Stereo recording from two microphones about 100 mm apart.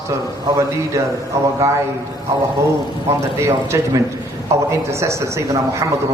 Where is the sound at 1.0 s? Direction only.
30° right (ahead or behind).